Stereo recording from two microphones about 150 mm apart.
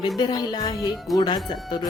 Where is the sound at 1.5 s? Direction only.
30° left (ahead or behind).